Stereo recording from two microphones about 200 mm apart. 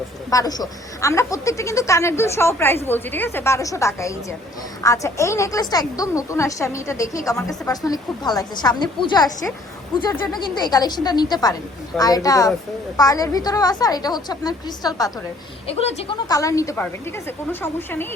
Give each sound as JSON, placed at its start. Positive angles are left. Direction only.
{"t": 0.3, "sound": "a woman's voice", "side_deg": 20}
{"t": 15.6, "sound": "a woman's voice", "side_deg": 30}
{"t": 16.3, "sound": "speech", "side_deg": 15}